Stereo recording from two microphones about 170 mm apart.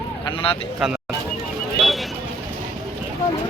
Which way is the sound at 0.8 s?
5° right (ahead or behind).